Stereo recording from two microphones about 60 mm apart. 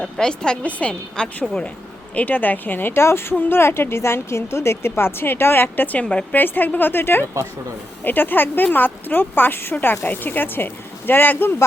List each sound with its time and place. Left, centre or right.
0.0 s a woman's voice: centre
2.1 s speech: left